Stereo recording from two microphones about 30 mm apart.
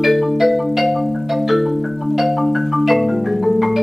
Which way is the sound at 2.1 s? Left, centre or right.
Centre.